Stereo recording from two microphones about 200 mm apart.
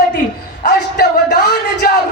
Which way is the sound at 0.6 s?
55° left (ahead or behind).